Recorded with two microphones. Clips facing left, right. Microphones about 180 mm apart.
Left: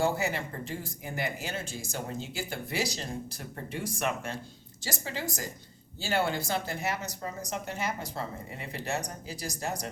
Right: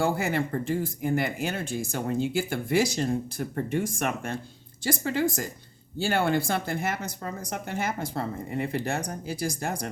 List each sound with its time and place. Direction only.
0.0 s a woman's voice: 55° right (ahead or behind)